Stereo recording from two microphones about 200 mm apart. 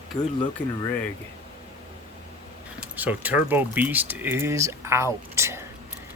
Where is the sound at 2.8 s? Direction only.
10° right (ahead or behind).